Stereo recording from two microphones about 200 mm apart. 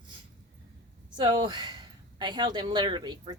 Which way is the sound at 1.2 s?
20° right (ahead or behind).